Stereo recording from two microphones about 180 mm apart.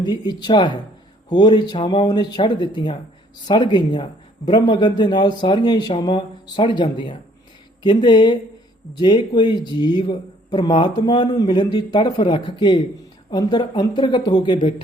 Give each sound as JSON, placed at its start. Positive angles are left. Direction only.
{"t": 0.0, "sound": "speech", "side_deg": 25}